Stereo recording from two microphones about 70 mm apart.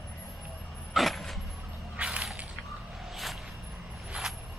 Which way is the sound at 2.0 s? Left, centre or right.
Centre.